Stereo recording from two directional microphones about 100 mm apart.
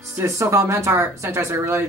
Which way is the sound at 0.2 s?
30° right (ahead or behind).